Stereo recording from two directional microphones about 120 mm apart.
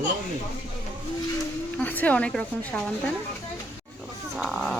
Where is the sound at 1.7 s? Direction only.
15° left (ahead or behind).